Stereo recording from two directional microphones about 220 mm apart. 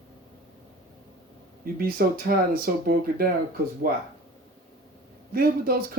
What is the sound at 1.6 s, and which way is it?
Speech, 40° right (ahead or behind).